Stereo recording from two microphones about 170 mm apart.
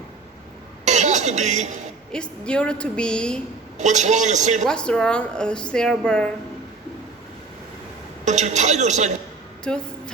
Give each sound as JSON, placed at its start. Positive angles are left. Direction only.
{"t": 0.9, "sound": "a sound", "side_deg": -45}
{"t": 2.1, "sound": "a woman's voice", "side_deg": 5}
{"t": 3.8, "sound": "a woman's voice", "side_deg": -45}
{"t": 4.6, "sound": "a woman's voice", "side_deg": 5}
{"t": 8.2, "sound": "a woman's voice", "side_deg": -45}
{"t": 9.7, "sound": "a woman's voice", "side_deg": 5}